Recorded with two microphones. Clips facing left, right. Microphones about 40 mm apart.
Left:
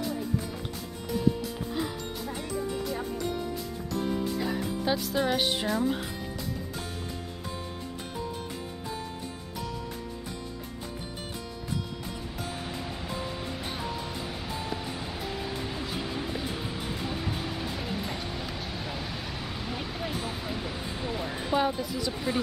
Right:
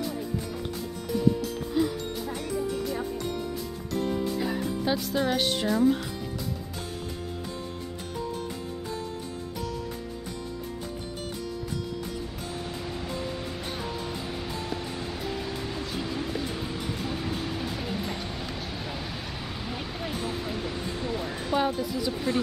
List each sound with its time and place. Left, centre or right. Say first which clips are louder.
1.7 s music: right 8 dB; centre
4.4 s speech: right 1 dB; centre
13.5 s music: right 1 dB; centre
19.6 s a sound: even; centre
22.1 s speech: right 2 dB; centre